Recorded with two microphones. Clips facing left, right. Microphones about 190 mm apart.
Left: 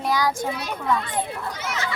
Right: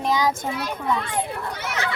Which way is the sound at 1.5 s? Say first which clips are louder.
Right 1 dB; 60° right (ahead or behind).